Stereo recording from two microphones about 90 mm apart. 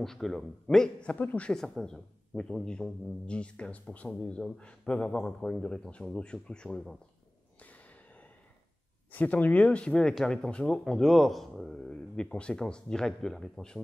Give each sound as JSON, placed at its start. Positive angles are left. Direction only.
{"t": 0.0, "sound": "speech", "side_deg": 5}
{"t": 1.1, "sound": "speech", "side_deg": 15}
{"t": 7.6, "sound": "a sound", "side_deg": 15}
{"t": 9.1, "sound": "speech", "side_deg": 20}